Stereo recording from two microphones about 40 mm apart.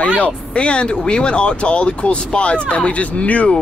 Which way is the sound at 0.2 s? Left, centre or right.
Left.